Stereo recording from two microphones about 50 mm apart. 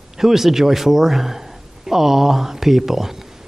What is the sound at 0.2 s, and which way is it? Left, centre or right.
A man's voice, centre.